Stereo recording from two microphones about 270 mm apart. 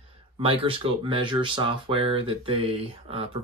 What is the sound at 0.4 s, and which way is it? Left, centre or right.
Speech, centre.